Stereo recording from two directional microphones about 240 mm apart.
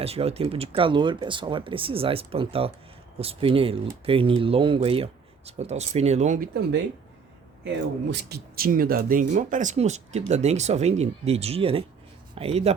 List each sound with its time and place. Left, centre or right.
0.0 s speech: right
8.1 s speech: right